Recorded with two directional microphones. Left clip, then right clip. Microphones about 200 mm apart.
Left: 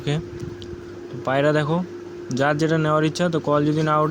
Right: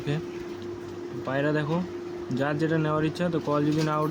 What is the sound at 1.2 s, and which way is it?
Speech, 30° left (ahead or behind).